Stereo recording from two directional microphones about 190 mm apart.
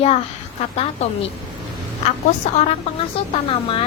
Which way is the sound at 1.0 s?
35° left (ahead or behind).